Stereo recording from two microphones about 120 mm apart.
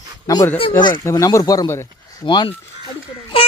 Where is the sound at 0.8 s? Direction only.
40° left (ahead or behind).